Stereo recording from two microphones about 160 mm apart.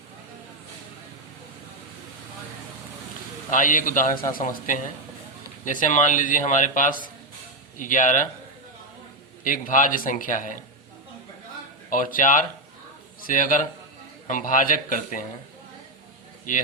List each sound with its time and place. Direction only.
3.5 s a man's voice: 55° left (ahead or behind)
9.4 s a man's voice: 55° left (ahead or behind)
11.9 s a man's voice: 55° left (ahead or behind)